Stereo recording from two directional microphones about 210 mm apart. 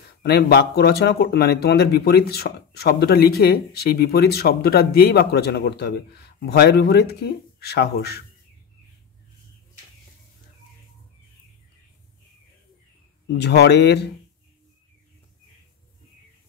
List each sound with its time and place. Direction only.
0.2 s speech: 50° left (ahead or behind)
13.3 s speech: 55° left (ahead or behind)